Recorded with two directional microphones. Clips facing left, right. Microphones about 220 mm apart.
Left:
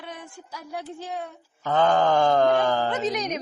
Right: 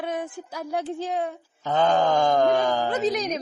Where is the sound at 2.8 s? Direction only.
35° right (ahead or behind).